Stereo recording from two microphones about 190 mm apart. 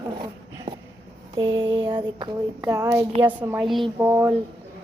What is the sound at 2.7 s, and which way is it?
A woman's voice, 15° right (ahead or behind).